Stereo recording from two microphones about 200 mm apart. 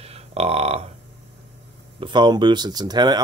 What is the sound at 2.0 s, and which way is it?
Speech, 20° right (ahead or behind).